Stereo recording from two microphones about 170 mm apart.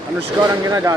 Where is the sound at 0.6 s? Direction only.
20° right (ahead or behind).